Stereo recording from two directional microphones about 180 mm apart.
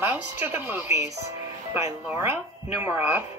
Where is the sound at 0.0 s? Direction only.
10° right (ahead or behind).